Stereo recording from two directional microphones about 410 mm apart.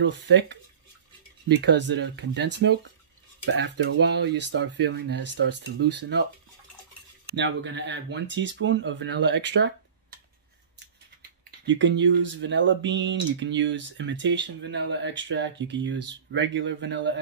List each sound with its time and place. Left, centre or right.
0.0 s speech: right
7.3 s speech: right
11.6 s speech: right